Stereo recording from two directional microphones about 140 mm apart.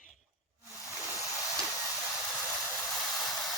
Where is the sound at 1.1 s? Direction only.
25° left (ahead or behind).